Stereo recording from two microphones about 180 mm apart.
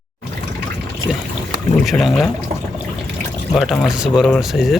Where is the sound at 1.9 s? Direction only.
Centre (ahead or behind).